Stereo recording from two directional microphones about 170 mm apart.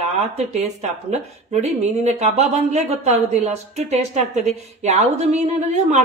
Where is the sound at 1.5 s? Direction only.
40° right (ahead or behind).